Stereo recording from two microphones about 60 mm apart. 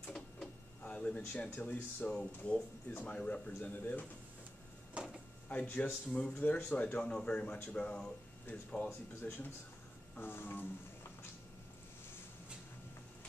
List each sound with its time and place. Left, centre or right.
0.4 s a sound: centre
1.6 s speech: left
5.0 s drawer open or close: centre
5.5 s speech: left
7.0 s speech: centre
10.1 s a sound: left